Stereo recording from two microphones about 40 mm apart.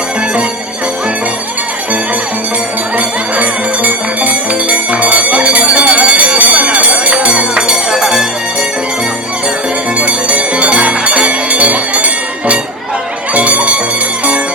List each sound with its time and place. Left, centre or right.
3.3 s music: right
5.4 s bell: right
7.9 s music: centre
10.0 s music: right